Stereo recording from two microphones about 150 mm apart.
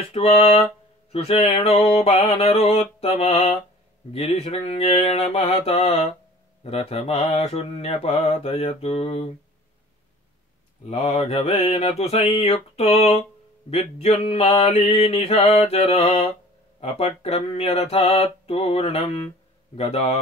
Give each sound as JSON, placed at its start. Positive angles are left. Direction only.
{"t": 0.0, "sound": "mantra", "side_deg": 40}
{"t": 10.9, "sound": "mantra", "side_deg": 40}